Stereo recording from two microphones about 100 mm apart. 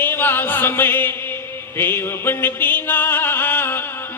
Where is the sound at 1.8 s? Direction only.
20° left (ahead or behind).